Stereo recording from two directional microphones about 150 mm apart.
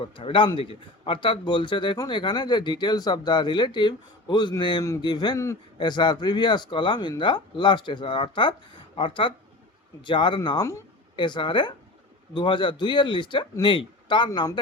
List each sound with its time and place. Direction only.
0.0 s speech: 35° left (ahead or behind)